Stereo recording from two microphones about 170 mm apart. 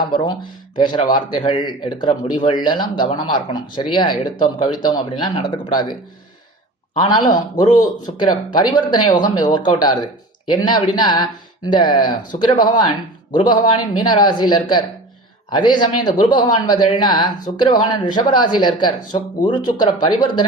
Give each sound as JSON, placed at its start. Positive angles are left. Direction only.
{"t": 0.1, "sound": "speech", "side_deg": 30}
{"t": 7.3, "sound": "speech", "side_deg": 25}